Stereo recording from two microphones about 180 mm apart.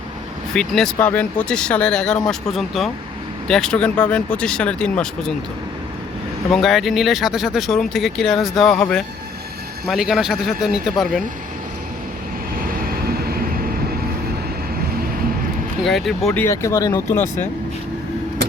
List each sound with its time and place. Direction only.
0.5 s speech: 5° left (ahead or behind)
6.5 s speech: centre (ahead or behind)
12.8 s vehicle: 55° right (ahead or behind)
15.8 s speech: centre (ahead or behind)
16.4 s speech: 15° left (ahead or behind)